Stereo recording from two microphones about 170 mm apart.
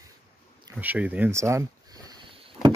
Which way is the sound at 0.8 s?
10° right (ahead or behind).